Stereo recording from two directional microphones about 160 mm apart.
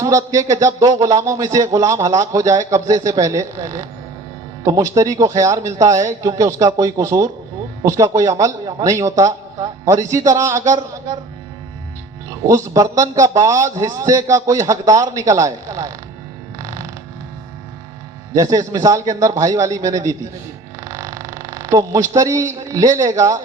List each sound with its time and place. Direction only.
0.0 s speech: 20° right (ahead or behind)
12.5 s speech: 20° right (ahead or behind)
16.6 s creak: 20° right (ahead or behind)
18.5 s speech: 20° right (ahead or behind)
20.8 s a sound: 20° right (ahead or behind)
22.7 s speech: 20° right (ahead or behind)